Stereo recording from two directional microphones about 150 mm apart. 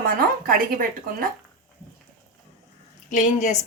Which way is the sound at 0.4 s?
70° right (ahead or behind).